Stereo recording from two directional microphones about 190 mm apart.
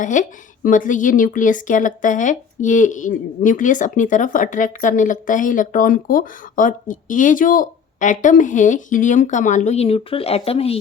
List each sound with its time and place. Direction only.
0.0 s speech: 40° left (ahead or behind)